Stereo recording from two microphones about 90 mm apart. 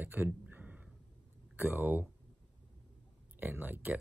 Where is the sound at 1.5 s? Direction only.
25° right (ahead or behind).